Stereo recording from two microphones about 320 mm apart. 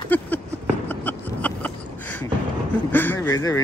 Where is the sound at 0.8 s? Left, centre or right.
Centre.